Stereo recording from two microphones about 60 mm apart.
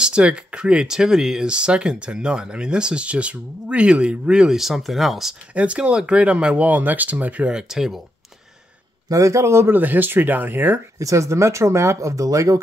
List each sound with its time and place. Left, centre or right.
0.0 s speech: centre
5.5 s speech: right
7.5 s speech: centre
9.1 s a man's voice: right
9.8 s speech: right
11.0 s speech: right